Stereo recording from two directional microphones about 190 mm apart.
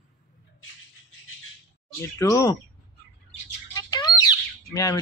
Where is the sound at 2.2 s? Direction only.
15° left (ahead or behind).